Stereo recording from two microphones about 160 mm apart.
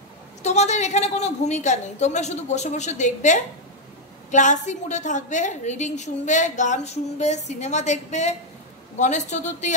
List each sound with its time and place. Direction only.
0.4 s a woman's voice: 45° left (ahead or behind)